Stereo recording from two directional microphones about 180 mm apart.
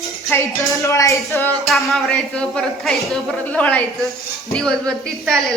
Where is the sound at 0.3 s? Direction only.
10° left (ahead or behind).